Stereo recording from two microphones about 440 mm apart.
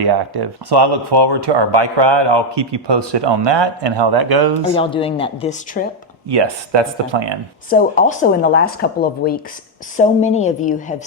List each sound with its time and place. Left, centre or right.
0.0 s speech: right
4.7 s speech: centre
6.2 s speech: right
7.7 s speech: centre